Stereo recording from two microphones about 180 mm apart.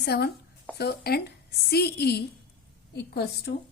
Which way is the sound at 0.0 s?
60° left (ahead or behind).